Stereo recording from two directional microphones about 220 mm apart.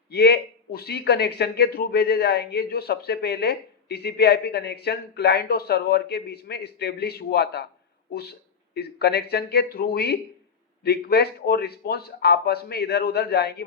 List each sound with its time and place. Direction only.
0.1 s a man's voice: 45° left (ahead or behind)